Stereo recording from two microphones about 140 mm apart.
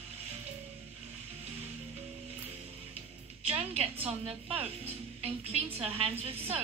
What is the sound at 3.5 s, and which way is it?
A woman's voice, 45° right (ahead or behind).